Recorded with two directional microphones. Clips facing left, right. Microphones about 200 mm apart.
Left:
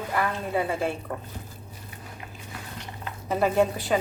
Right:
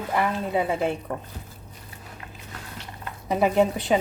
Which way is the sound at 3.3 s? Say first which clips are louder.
Right 2 dB; 15° right (ahead or behind).